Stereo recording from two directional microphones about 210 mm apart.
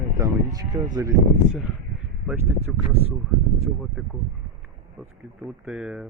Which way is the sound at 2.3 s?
10° right (ahead or behind).